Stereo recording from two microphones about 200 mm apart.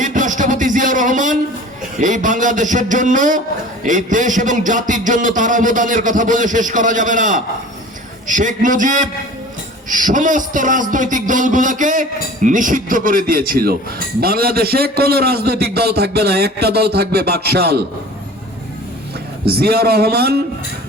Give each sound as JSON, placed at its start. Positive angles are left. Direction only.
{"t": 0.0, "sound": "a sound", "side_deg": -40}
{"t": 2.0, "sound": "a man's voice", "side_deg": -40}
{"t": 19.5, "sound": "a man's voice", "side_deg": -50}